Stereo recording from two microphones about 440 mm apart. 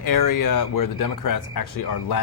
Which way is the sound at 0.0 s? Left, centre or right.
Left.